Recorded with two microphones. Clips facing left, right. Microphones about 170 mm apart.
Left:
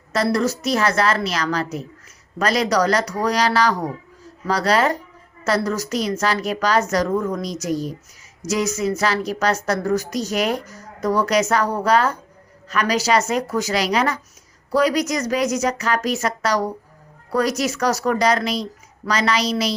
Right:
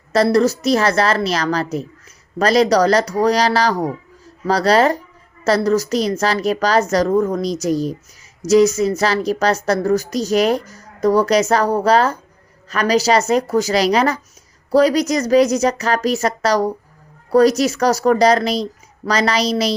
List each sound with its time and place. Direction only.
0.1 s speech: 35° right (ahead or behind)